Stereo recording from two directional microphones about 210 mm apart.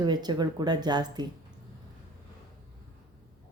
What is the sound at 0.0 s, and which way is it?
A woman's voice, 20° right (ahead or behind).